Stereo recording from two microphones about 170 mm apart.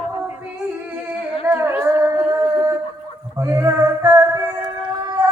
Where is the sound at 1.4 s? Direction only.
10° right (ahead or behind).